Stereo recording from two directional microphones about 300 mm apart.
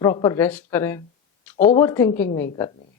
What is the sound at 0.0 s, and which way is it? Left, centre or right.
A woman's voice, centre.